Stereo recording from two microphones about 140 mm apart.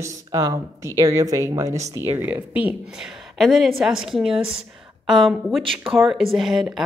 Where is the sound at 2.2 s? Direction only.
10° right (ahead or behind).